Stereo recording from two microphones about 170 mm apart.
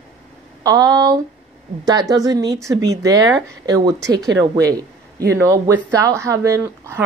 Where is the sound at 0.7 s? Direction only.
20° right (ahead or behind).